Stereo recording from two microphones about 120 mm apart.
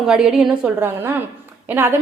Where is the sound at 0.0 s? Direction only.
5° right (ahead or behind).